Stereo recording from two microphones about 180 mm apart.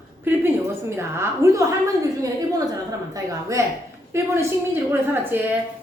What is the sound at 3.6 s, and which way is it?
A woman's voice, 15° right (ahead or behind).